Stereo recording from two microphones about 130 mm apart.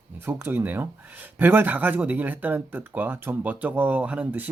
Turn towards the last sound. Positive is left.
turn(degrees=-10)  # may be behind; listen again after turning